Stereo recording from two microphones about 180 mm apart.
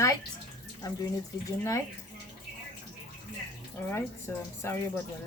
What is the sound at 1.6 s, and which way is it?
Speech, 15° left (ahead or behind).